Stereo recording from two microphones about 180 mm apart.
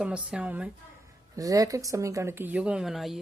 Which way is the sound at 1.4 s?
20° right (ahead or behind).